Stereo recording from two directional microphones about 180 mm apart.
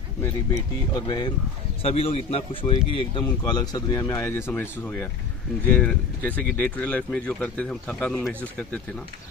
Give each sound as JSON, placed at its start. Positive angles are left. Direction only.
{"t": 0.9, "sound": "a man's voice", "side_deg": 25}